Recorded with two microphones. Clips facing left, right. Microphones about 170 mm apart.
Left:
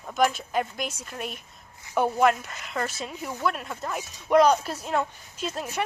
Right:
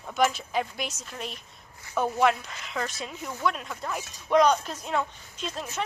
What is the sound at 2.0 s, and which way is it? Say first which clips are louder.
Speech: left 3 dB; 15° left (ahead or behind).